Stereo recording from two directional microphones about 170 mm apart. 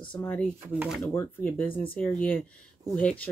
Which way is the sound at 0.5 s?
10° right (ahead or behind).